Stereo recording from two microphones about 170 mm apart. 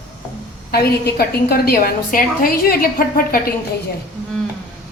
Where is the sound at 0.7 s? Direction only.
65° left (ahead or behind).